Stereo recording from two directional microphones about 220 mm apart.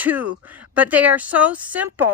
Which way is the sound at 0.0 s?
5° right (ahead or behind).